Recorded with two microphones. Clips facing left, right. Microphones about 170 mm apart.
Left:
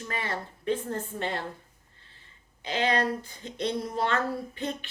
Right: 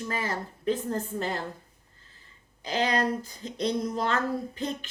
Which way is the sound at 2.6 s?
40° right (ahead or behind).